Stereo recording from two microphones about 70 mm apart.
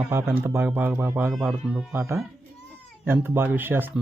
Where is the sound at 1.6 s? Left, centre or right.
Centre.